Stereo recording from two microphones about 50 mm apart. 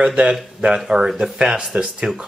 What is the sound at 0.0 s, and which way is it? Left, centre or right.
Speech, centre.